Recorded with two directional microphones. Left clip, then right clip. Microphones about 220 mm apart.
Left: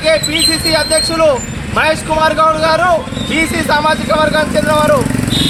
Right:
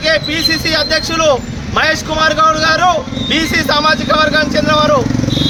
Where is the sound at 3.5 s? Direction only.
20° right (ahead or behind).